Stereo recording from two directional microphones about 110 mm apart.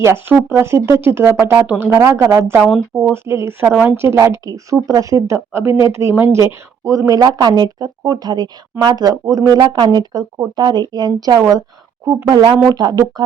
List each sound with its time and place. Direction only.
0.0 s speech: 20° right (ahead or behind)
2.6 s speech: centre (ahead or behind)
2.9 s speech: 15° right (ahead or behind); by 13.2 s 40° right (ahead or behind)